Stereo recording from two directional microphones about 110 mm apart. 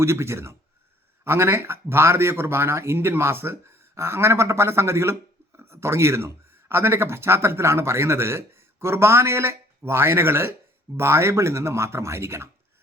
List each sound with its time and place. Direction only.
0.0 s speech: 25° right (ahead or behind)